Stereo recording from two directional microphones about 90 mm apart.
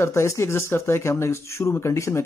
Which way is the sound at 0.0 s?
30° left (ahead or behind).